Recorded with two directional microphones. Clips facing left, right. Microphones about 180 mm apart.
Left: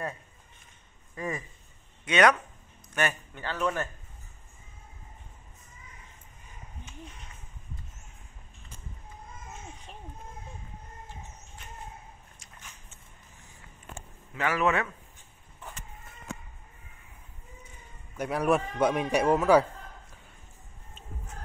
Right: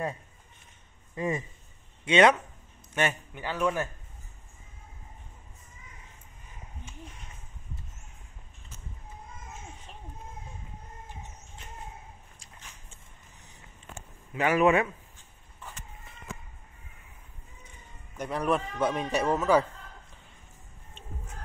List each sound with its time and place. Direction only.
1.1 s a man's voice: 25° right (ahead or behind)
3.3 s a man's voice: 10° right (ahead or behind)
14.3 s a man's voice: 15° right (ahead or behind)
18.1 s a man's voice: 10° left (ahead or behind)